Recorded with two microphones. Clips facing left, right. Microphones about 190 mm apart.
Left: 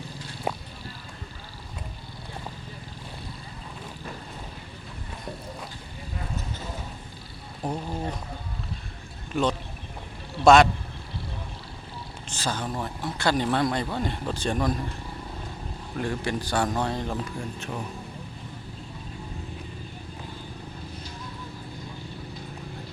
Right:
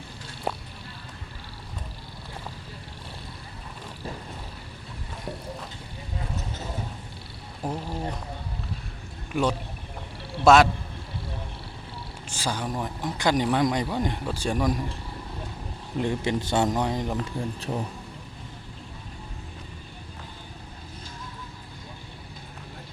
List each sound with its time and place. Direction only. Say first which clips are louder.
7.6 s speech: left 1 dB; 5° right (ahead or behind)
9.3 s a man's voice: even; 10° right (ahead or behind)
12.3 s speech: right 1 dB; 10° right (ahead or behind)
16.0 s speech: right 3 dB; 20° right (ahead or behind)
17.3 s speech: right 3 dB; 35° right (ahead or behind)